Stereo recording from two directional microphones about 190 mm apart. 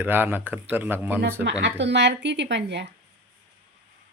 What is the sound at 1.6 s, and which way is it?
Speech, 70° right (ahead or behind).